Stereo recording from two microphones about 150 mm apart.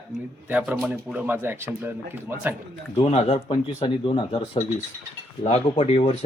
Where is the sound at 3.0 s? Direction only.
40° left (ahead or behind).